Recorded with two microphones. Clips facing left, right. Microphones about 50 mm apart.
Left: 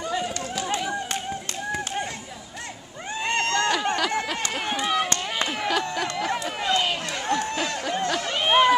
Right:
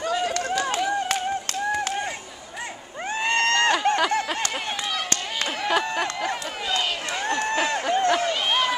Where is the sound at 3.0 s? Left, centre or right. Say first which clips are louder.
Right 3 dB; right.